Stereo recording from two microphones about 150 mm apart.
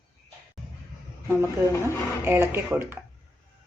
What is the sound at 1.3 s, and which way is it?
A woman's voice, 20° right (ahead or behind).